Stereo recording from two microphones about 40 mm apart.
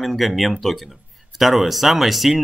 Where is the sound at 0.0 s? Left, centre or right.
Centre.